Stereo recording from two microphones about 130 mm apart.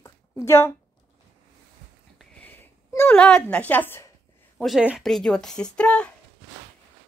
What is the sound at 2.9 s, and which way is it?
Speech, 20° left (ahead or behind).